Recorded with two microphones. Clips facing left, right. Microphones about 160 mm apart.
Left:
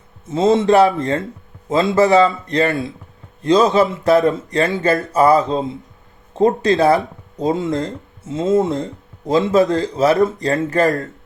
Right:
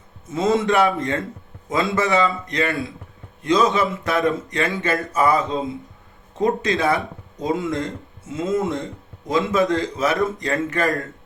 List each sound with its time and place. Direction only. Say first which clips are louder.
0.3 s speech: left 6 dB; 30° left (ahead or behind)